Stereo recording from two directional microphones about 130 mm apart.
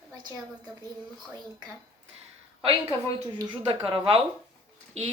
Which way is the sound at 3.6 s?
45° right (ahead or behind).